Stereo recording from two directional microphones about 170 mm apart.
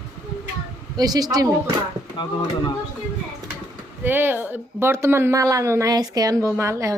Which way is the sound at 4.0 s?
10° right (ahead or behind).